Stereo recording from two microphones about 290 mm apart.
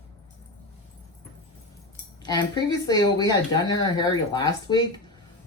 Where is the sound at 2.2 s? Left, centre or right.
Centre.